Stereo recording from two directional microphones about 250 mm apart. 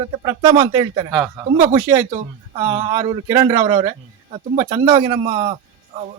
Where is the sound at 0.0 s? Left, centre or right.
Centre.